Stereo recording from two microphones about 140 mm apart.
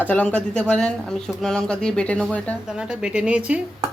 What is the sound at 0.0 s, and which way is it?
Speech, 10° left (ahead or behind).